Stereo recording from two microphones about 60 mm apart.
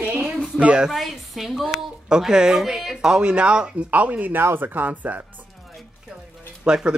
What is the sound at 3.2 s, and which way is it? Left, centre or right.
Speech, centre.